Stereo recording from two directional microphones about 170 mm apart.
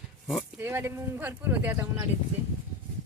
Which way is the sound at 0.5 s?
15° right (ahead or behind).